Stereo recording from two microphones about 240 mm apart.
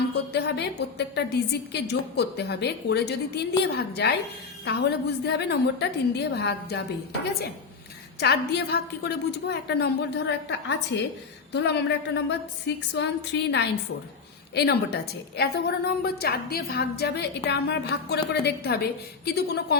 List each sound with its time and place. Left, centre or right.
0.3 s a woman's voice: left
8.2 s a woman's voice: left